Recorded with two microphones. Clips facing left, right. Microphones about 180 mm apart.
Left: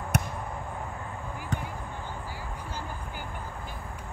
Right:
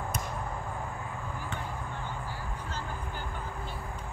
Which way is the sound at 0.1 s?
70° left (ahead or behind).